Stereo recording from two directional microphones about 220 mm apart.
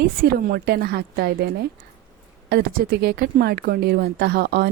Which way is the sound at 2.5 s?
45° right (ahead or behind).